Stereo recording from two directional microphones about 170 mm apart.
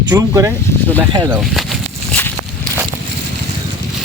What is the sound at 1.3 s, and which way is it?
Speech, centre (ahead or behind).